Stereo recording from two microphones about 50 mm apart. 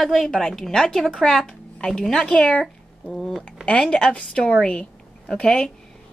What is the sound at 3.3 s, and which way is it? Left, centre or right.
Speech, centre.